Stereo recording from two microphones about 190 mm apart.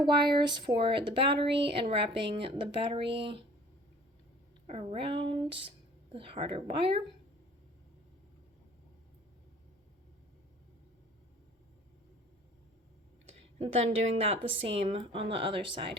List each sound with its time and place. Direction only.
0.3 s speech: 25° right (ahead or behind)
4.6 s a woman's voice: 35° right (ahead or behind)
13.6 s a woman's voice: 35° right (ahead or behind)